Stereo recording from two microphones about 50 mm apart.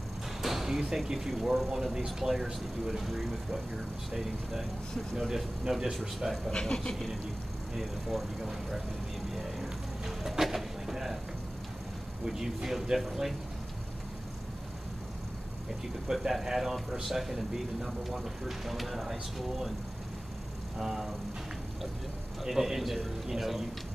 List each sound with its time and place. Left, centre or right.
0.4 s speech: centre
6.5 s speech: centre
7.7 s speech: centre
9.3 s a sound: centre
12.3 s speech: centre
16.1 s speech: centre
20.7 s speech: centre
22.4 s speech: centre